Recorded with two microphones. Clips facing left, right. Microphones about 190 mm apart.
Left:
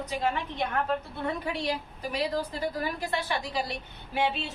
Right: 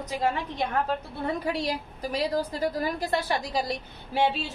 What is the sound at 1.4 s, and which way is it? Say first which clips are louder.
A woman's voice: right 2 dB; 40° right (ahead or behind).